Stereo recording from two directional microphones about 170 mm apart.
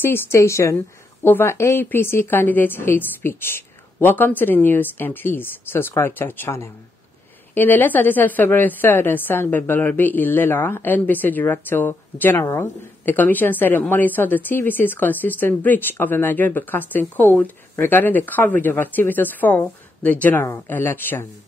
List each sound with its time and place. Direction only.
0.0 s a woman's voice: 15° left (ahead or behind)